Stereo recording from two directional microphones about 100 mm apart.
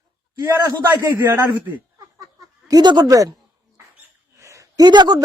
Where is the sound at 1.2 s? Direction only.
20° right (ahead or behind).